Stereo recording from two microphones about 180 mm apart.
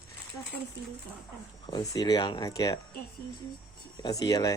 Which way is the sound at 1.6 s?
20° left (ahead or behind).